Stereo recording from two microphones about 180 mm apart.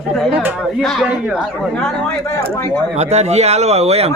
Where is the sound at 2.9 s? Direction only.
40° right (ahead or behind).